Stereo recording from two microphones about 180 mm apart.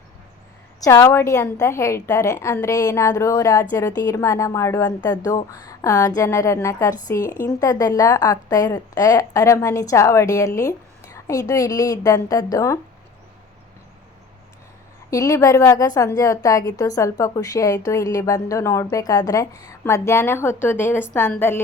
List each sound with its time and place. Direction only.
0.9 s a woman's voice: 15° left (ahead or behind)
15.1 s a woman's voice: 20° left (ahead or behind)